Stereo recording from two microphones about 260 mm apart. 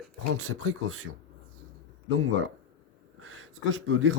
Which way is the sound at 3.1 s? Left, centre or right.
Right.